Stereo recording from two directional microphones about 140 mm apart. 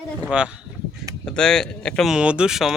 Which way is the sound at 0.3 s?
5° right (ahead or behind).